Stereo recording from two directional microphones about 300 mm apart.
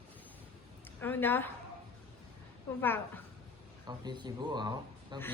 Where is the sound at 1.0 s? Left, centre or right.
Centre.